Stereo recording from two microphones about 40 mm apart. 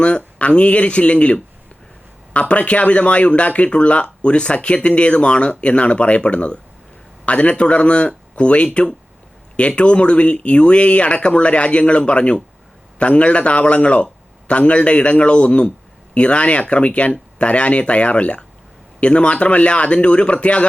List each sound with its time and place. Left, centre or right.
0.3 s speech: left